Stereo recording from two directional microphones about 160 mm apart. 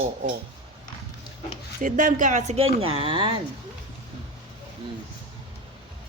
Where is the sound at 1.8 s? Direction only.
55° right (ahead or behind); by 3.3 s 35° right (ahead or behind).